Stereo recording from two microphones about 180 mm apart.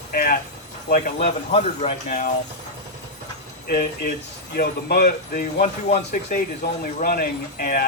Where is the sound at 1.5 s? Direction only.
35° left (ahead or behind).